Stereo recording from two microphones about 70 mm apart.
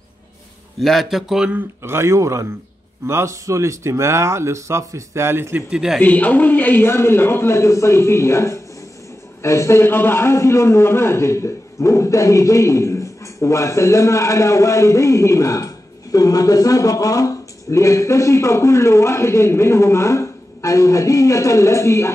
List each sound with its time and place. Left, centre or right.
0.7 s a man's voice: centre
1.8 s a man's voice: right
5.7 s a man's voice: centre
5.9 s a man's voice: left